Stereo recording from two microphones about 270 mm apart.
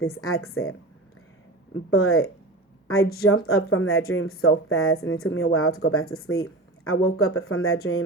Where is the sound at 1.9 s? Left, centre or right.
Left.